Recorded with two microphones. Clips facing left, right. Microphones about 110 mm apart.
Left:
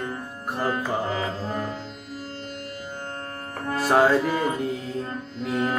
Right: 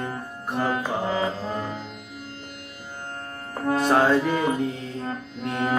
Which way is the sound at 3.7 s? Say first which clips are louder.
Even; centre (ahead or behind).